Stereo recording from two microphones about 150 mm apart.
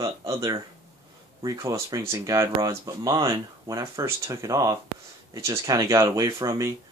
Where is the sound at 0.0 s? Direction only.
20° right (ahead or behind).